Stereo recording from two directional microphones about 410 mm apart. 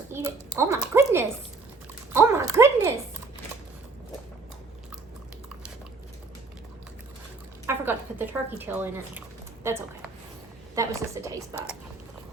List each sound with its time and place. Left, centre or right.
0.1 s a woman's voice: centre
2.1 s a sound: centre
7.7 s speech: centre
10.8 s speech: centre